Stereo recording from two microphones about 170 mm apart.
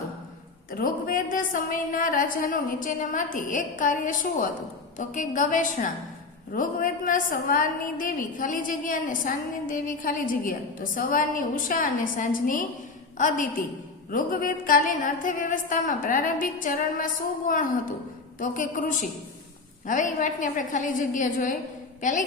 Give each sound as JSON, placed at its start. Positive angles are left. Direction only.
{"t": 0.7, "sound": "a woman's voice", "side_deg": 55}